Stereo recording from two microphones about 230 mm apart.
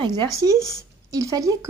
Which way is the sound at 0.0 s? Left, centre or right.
Centre.